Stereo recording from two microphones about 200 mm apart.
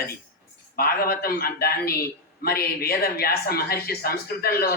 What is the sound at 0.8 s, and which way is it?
A man's voice, 50° left (ahead or behind).